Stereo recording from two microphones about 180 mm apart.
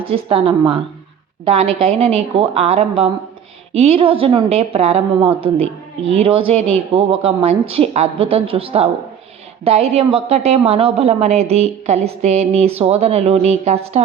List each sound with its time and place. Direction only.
0.0 s a woman's voice: 30° right (ahead or behind)